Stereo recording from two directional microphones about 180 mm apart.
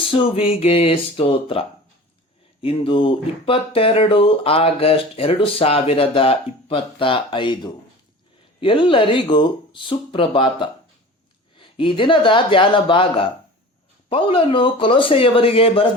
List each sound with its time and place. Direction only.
0.1 s speech: 30° left (ahead or behind)